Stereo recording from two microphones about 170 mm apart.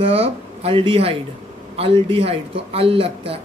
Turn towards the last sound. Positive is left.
turn(degrees=-35)  # may be behind; listen again after turning